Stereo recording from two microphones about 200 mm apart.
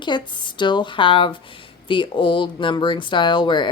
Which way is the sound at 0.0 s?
25° left (ahead or behind).